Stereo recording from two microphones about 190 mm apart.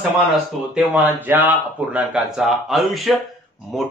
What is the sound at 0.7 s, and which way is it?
A man's voice, 10° right (ahead or behind).